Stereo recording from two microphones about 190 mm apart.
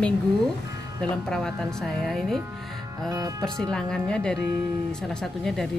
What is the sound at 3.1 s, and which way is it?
Speech, 20° right (ahead or behind).